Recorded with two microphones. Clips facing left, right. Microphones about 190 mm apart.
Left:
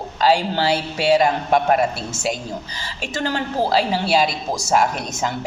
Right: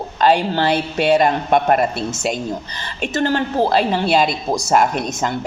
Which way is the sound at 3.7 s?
55° right (ahead or behind).